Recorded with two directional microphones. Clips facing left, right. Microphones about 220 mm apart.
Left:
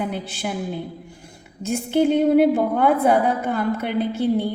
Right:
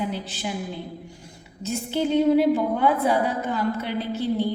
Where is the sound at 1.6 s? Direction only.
55° left (ahead or behind).